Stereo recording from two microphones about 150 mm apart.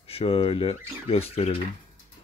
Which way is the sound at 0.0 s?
40° left (ahead or behind).